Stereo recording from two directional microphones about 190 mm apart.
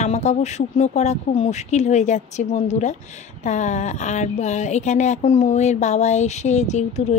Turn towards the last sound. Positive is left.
turn(degrees=35)  # may be behind; listen again after turning